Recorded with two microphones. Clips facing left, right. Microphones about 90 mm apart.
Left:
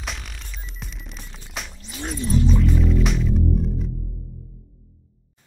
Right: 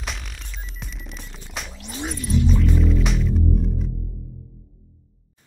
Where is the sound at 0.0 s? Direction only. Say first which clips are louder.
Even; centre (ahead or behind).